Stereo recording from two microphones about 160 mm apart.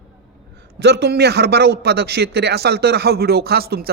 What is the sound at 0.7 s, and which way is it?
A man's voice, 90° right.